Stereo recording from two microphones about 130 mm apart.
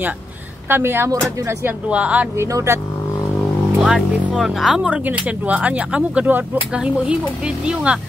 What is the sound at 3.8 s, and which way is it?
Speech, 5° right (ahead or behind).